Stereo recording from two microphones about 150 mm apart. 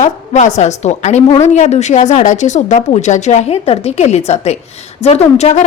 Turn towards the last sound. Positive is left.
turn(degrees=45)  # may be behind; listen again after turning